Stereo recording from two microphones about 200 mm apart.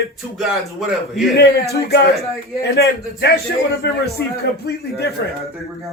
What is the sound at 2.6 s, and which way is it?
A man's voice, 55° left (ahead or behind).